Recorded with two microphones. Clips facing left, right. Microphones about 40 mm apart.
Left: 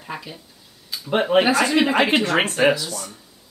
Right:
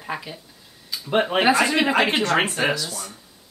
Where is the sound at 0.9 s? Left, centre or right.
Centre.